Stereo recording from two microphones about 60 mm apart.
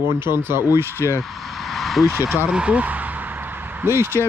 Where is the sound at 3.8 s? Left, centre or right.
Right.